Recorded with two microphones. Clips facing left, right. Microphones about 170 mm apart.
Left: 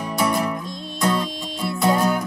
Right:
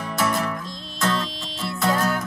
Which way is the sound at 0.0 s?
15° left (ahead or behind).